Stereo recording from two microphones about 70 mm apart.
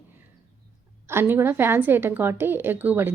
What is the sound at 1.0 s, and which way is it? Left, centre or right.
A woman's voice, right.